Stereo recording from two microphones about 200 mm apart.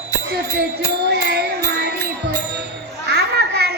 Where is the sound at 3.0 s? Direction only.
55° right (ahead or behind).